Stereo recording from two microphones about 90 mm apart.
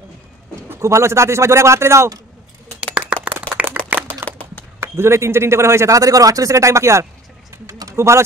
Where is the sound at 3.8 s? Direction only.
15° left (ahead or behind).